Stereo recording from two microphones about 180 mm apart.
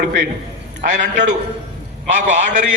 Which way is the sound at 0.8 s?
45° right (ahead or behind).